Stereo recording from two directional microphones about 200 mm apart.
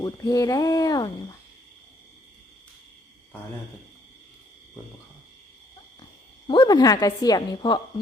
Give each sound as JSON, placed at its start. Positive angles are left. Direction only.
{"t": 0.0, "sound": "speech", "side_deg": 15}
{"t": 6.5, "sound": "a woman's voice", "side_deg": 20}